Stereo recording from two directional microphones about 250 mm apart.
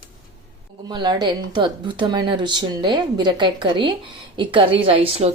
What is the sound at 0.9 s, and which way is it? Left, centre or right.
A woman's voice, centre.